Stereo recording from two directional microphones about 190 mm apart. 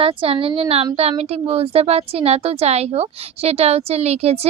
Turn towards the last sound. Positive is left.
turn(degrees=-35)  # may be behind; listen again after turning